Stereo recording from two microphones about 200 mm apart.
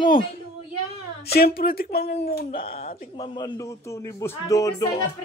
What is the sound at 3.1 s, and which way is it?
A man's voice, 25° left (ahead or behind).